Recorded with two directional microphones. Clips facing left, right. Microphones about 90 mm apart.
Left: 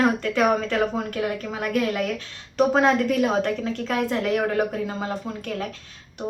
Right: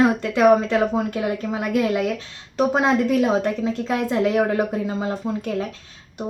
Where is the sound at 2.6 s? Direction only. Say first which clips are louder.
Even; 15° right (ahead or behind).